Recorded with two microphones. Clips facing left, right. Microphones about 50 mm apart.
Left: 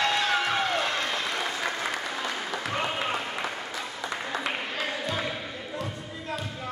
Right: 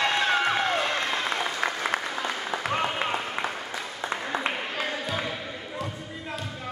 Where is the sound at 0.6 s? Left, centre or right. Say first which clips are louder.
Right 1 dB; right.